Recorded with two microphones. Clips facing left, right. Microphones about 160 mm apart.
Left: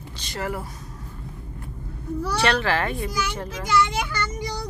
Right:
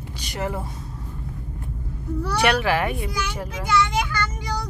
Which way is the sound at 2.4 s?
10° right (ahead or behind).